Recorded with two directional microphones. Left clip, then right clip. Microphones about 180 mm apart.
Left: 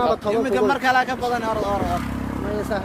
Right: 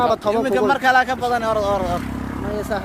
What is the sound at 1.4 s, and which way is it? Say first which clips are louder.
Speech: right 4 dB; 80° right.